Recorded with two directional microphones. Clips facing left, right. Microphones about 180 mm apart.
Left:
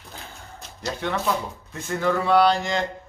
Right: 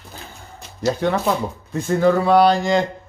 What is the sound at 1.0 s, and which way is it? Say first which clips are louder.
A man's voice: right 3 dB; 40° right (ahead or behind).